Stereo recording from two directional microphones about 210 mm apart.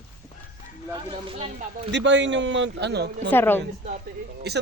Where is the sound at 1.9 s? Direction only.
60° right (ahead or behind).